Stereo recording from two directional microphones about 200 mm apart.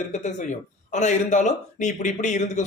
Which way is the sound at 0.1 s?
35° left (ahead or behind).